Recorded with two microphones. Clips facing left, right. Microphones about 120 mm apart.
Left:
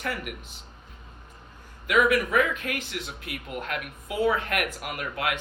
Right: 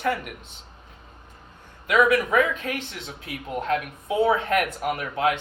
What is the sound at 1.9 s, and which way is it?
Speech, 30° right (ahead or behind).